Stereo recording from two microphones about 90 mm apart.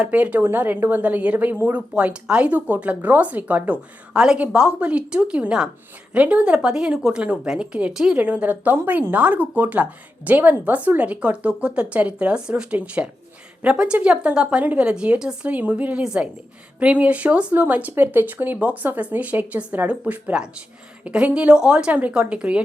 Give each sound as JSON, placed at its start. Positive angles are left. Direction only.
{"t": 0.0, "sound": "speech", "side_deg": -15}